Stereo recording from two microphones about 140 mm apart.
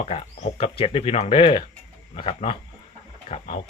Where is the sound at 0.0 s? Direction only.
45° left (ahead or behind).